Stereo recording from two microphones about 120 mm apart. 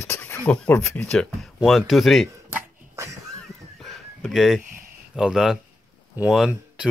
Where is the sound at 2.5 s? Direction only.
25° right (ahead or behind).